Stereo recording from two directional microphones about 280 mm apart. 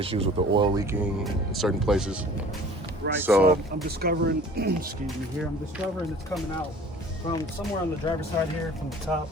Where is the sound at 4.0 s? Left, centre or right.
Right.